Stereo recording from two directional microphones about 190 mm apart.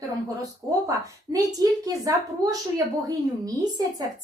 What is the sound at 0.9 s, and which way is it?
A woman's voice, 20° right (ahead or behind).